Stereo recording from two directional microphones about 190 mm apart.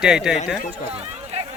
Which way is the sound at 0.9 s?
30° right (ahead or behind).